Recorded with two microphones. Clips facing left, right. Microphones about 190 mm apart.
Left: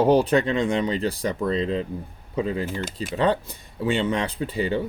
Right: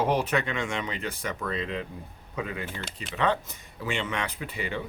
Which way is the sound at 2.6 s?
40° left (ahead or behind).